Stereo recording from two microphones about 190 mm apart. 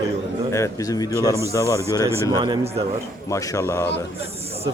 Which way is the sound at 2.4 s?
20° right (ahead or behind).